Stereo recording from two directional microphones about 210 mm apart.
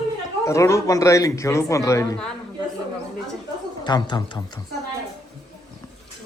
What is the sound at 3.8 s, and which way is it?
Speech, 20° left (ahead or behind).